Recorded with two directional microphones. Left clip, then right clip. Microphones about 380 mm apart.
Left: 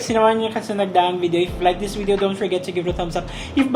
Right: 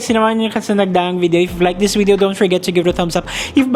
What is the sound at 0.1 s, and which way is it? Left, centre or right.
Speech, right.